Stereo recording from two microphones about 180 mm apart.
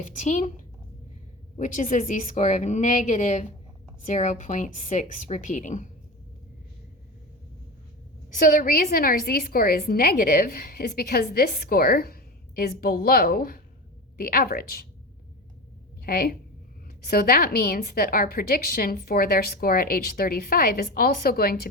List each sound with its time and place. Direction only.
0.0 s a woman's voice: 40° left (ahead or behind)
1.5 s a woman's voice: 45° left (ahead or behind)
8.4 s a woman's voice: 50° left (ahead or behind)
16.0 s a woman's voice: 55° left (ahead or behind)